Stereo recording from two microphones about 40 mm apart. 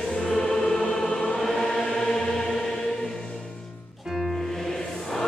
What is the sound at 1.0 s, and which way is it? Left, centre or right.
Choir, left.